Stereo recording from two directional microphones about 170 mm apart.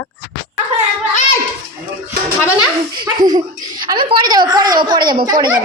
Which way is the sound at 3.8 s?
30° right (ahead or behind).